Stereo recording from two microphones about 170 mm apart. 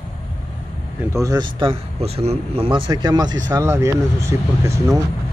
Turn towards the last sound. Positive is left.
turn(degrees=-15)  # may be behind; listen again after turning